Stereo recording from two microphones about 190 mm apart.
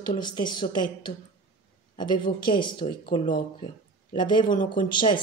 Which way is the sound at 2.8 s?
30° left (ahead or behind).